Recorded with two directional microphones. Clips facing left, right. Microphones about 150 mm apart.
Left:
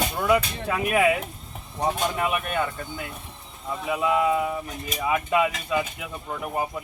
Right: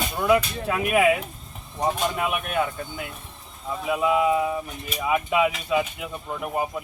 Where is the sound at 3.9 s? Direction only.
5° right (ahead or behind).